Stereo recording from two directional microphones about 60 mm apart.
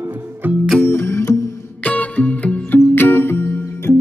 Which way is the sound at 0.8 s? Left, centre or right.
Left.